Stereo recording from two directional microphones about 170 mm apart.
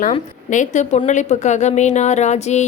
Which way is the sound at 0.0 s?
45° left (ahead or behind).